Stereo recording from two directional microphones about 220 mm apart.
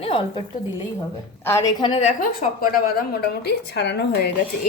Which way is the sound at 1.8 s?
20° left (ahead or behind).